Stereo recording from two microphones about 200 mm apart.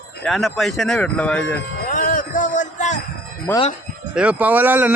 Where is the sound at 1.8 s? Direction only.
40° left (ahead or behind).